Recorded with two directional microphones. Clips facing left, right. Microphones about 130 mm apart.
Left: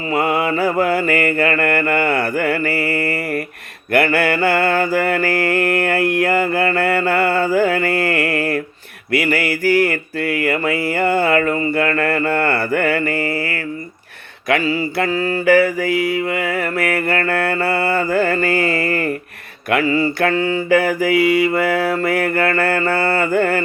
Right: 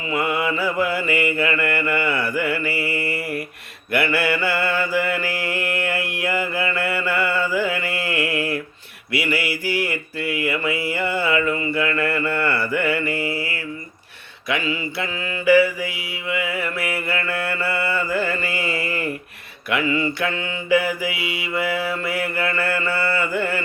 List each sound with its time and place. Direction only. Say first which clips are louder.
0.1 s mantra: left 4 dB; 40° left (ahead or behind)
14.6 s mantra: left 7 dB; 40° left (ahead or behind)
19.7 s mantra: left 5 dB; 35° left (ahead or behind)